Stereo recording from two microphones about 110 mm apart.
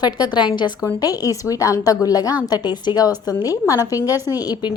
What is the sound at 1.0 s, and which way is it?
A woman's voice, 35° left (ahead or behind).